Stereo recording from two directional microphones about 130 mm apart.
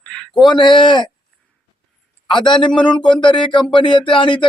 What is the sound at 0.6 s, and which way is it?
Speech, 35° left (ahead or behind).